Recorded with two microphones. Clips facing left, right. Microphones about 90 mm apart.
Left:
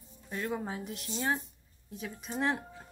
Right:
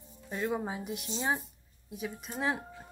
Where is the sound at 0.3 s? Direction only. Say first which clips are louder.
Right 2 dB; 10° right (ahead or behind).